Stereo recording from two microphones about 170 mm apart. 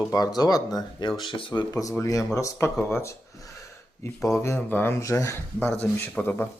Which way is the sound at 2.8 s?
15° left (ahead or behind).